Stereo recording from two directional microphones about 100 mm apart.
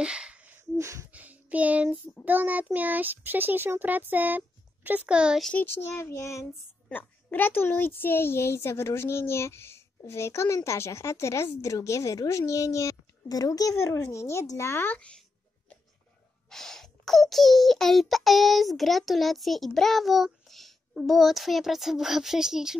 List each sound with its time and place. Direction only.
0.0 s a sound: 10° right (ahead or behind)
0.7 s gasp: 30° right (ahead or behind)
1.1 s a sound: 15° right (ahead or behind)
2.2 s a child's voice: 15° right (ahead or behind)
5.4 s a child's voice: 15° left (ahead or behind)
5.8 s a woman's voice: 25° left (ahead or behind)
6.9 s a woman's voice: 20° left (ahead or behind)
16.4 s a child's voice: 5° left (ahead or behind)